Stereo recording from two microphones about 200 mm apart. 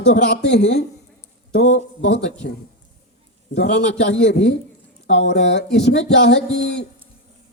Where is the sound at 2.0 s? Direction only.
60° left (ahead or behind).